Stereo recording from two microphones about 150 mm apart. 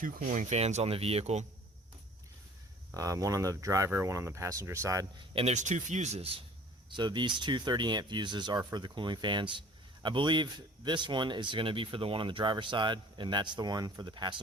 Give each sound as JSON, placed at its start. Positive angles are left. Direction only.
{"t": 0.0, "sound": "speech", "side_deg": -65}
{"t": 2.9, "sound": "speech", "side_deg": -20}
{"t": 5.3, "sound": "speech", "side_deg": -45}
{"t": 6.9, "sound": "speech", "side_deg": -30}